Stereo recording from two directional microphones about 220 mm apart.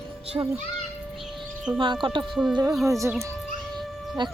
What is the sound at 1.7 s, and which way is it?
Speech, 5° right (ahead or behind).